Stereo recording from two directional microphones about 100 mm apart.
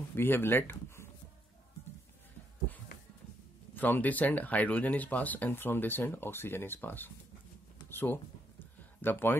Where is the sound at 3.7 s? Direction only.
20° left (ahead or behind).